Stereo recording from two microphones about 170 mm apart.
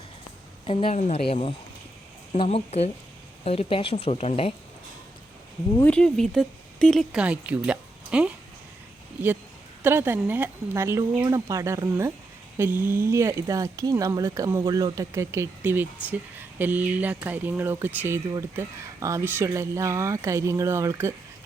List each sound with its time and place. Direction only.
0.6 s speech: 30° left (ahead or behind)
5.7 s speech: 10° left (ahead or behind)
7.1 s speech: 5° right (ahead or behind)
9.8 s speech: 15° right (ahead or behind)